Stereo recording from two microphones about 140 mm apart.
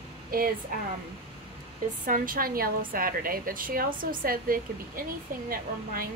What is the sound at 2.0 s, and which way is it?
A woman's voice, 80° right.